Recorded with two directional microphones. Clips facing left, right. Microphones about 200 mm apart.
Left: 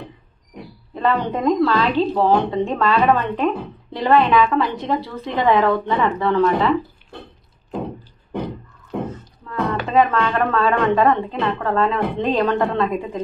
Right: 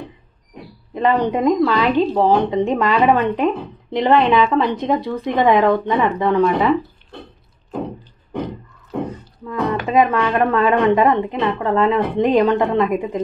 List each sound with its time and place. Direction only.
0.9 s a woman's voice: 15° right (ahead or behind)
9.0 s speech: 15° right (ahead or behind)